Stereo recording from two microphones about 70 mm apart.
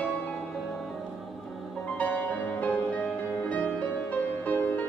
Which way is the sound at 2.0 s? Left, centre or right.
Left.